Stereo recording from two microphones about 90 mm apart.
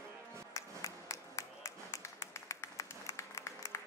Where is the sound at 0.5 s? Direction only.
35° left (ahead or behind).